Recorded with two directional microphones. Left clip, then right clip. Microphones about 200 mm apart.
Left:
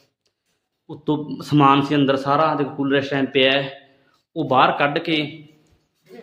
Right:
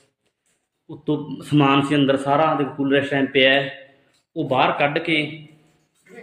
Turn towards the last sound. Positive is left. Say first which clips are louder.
# even
turn(degrees=15)  # may be behind; listen again after turning